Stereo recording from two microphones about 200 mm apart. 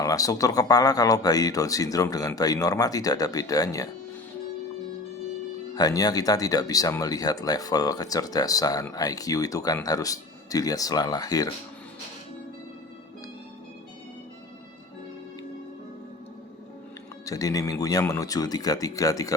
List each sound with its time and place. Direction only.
0.0 s speech: 15° left (ahead or behind)
5.7 s speech: 20° left (ahead or behind)
17.2 s speech: 15° left (ahead or behind)